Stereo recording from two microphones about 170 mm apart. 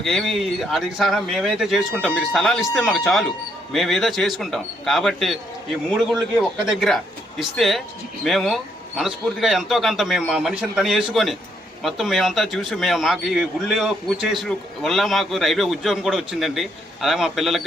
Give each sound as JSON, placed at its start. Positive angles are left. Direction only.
{"t": 0.0, "sound": "a man's voice", "side_deg": 0}